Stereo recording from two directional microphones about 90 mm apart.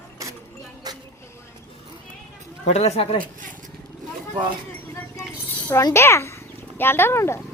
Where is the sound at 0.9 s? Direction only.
50° right (ahead or behind).